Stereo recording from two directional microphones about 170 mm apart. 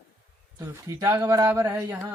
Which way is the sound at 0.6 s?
20° right (ahead or behind).